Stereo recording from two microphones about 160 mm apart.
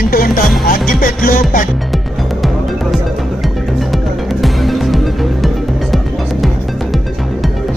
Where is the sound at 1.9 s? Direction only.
Centre (ahead or behind).